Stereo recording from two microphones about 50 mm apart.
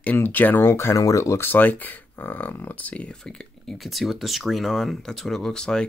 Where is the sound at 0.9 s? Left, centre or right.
Left.